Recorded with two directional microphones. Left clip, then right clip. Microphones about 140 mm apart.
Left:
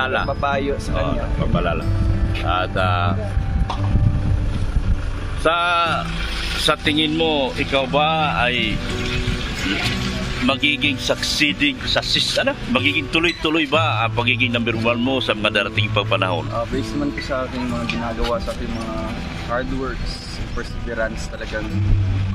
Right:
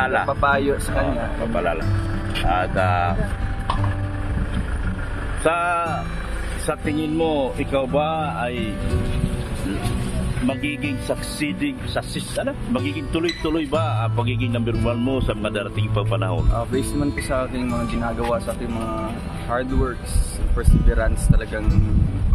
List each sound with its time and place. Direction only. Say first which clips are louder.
0.0 s speech: even; 5° left (ahead or behind)
0.3 s speech: right 2 dB; 10° right (ahead or behind)
2.5 s speech: even; centre (ahead or behind)
5.5 s speech: left 4 dB; 25° left (ahead or behind)
7.2 s speech: left 2 dB; 15° right (ahead or behind)
10.4 s speech: left 7 dB; centre (ahead or behind)
16.7 s speech: even; 35° right (ahead or behind)